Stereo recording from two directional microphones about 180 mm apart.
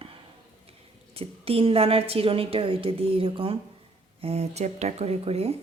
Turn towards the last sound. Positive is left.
turn(degrees=-35)  # may be behind; listen again after turning